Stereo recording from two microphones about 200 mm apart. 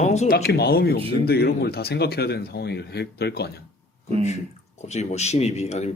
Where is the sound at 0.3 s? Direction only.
50° left (ahead or behind).